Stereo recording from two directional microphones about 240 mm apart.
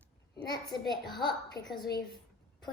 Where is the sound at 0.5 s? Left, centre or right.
Centre.